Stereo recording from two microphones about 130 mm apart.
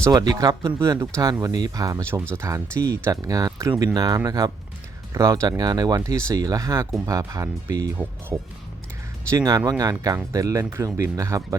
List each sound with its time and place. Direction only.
0.0 s speech: 30° right (ahead or behind)